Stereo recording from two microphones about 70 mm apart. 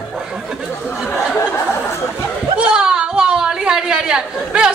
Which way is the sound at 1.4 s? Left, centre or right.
Left.